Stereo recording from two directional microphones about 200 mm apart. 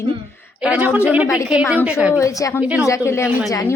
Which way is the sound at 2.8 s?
15° left (ahead or behind).